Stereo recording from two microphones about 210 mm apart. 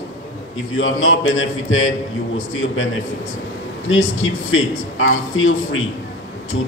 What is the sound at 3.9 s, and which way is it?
Speech, 70° left (ahead or behind).